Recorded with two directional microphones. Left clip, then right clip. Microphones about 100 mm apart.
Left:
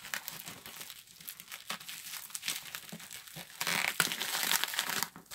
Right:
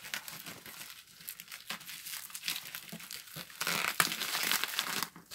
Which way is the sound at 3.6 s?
30° left (ahead or behind).